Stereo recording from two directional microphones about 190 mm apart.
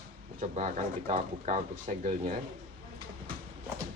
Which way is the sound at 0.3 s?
40° right (ahead or behind).